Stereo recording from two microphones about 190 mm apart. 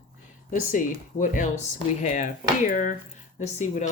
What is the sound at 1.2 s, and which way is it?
Speech, 45° left (ahead or behind).